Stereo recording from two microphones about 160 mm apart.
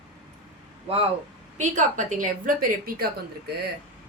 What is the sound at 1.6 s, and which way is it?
Speech, 50° right (ahead or behind).